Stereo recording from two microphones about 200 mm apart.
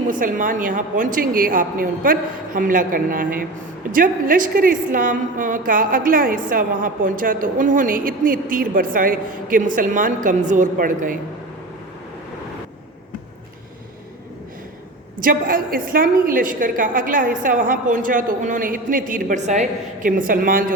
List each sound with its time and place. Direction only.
0.1 s a woman's voice: 40° right (ahead or behind)
15.2 s a woman's voice: 45° right (ahead or behind)